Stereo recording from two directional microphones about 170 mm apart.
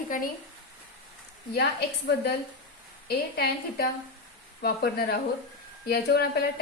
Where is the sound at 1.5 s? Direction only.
75° left (ahead or behind).